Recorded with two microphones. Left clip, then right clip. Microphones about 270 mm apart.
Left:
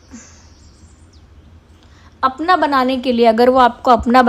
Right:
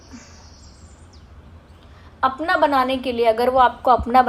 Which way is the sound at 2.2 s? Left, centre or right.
Left.